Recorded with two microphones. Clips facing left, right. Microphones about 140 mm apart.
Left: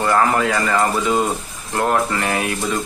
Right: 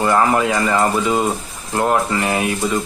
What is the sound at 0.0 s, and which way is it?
Speech, 15° right (ahead or behind).